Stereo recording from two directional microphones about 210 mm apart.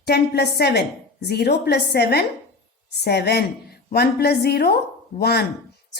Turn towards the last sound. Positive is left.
turn(degrees=50)  # may be behind; listen again after turning